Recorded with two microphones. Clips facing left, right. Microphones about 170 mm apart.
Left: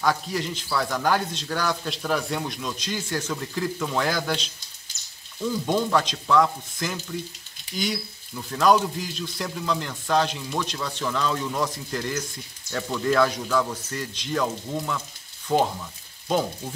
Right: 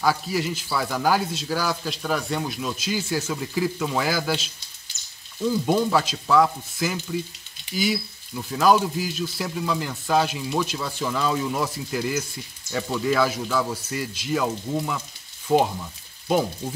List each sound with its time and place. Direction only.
0.0 s speech: 5° right (ahead or behind)
5.5 s speech: 5° right (ahead or behind)